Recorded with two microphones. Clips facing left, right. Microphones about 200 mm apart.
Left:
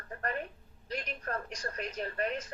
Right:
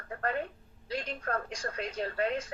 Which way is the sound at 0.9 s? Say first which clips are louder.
Right 3 dB; 30° right (ahead or behind).